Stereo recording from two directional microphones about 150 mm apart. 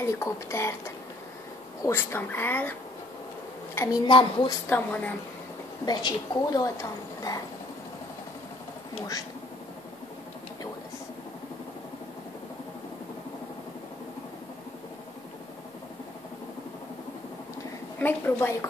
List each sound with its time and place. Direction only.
0.0 s speech: 20° left (ahead or behind)
3.7 s speech: 15° left (ahead or behind)
4.0 s a woman's voice: 30° left (ahead or behind)
4.6 s speech: 10° left (ahead or behind)
5.9 s a woman's voice: 25° left (ahead or behind)
17.9 s a woman's voice: 10° left (ahead or behind)